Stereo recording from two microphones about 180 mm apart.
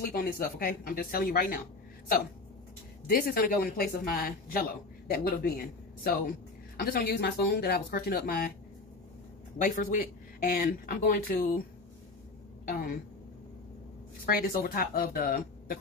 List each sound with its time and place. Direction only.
0.0 s speech: 55° left (ahead or behind)
3.1 s speech: 55° left (ahead or behind)
6.8 s speech: 60° left (ahead or behind)
9.6 s speech: 50° left (ahead or behind)
12.6 s speech: 55° left (ahead or behind)
14.2 s speech: 50° left (ahead or behind)